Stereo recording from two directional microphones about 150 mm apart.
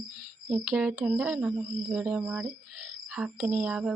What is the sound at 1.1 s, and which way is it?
Speech, 5° right (ahead or behind).